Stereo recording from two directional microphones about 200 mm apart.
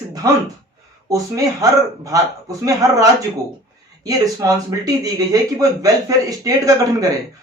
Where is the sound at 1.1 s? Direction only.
15° right (ahead or behind).